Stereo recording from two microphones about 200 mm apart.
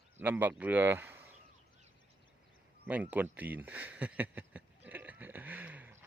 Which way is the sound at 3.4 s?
10° right (ahead or behind).